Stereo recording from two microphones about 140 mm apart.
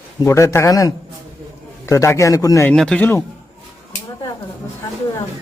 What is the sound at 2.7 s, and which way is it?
Speech, 5° left (ahead or behind).